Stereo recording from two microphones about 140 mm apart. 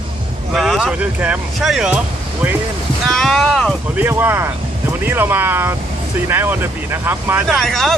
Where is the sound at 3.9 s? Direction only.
15° right (ahead or behind).